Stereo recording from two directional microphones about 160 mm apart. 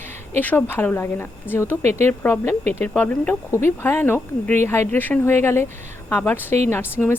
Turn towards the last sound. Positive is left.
turn(degrees=15)  # may be behind; listen again after turning